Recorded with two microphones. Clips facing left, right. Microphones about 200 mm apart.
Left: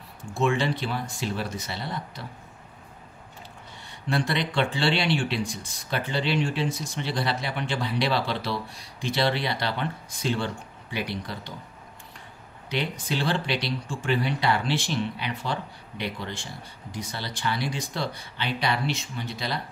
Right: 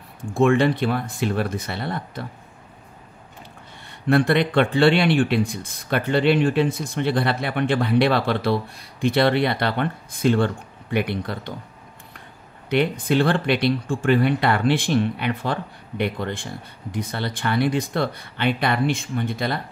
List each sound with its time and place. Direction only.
0.3 s speech: 55° right (ahead or behind)
4.1 s speech: 55° right (ahead or behind)
12.6 s speech: 55° right (ahead or behind)